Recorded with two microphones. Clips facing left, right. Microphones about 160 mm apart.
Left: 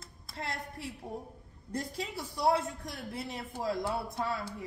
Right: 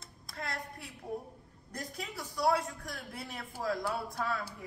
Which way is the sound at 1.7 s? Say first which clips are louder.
Left 5 dB; 30° left (ahead or behind).